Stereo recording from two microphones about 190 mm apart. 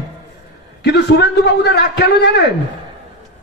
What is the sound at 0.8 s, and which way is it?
A man's voice, 65° left (ahead or behind).